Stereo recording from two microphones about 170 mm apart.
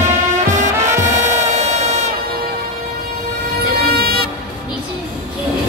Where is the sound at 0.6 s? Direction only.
45° right (ahead or behind).